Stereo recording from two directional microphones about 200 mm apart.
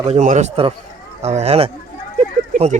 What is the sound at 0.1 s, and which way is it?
Speech, 35° right (ahead or behind).